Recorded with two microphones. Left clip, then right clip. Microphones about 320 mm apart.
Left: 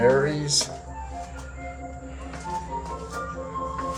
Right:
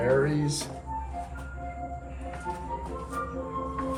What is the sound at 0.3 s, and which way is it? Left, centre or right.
Speech, centre.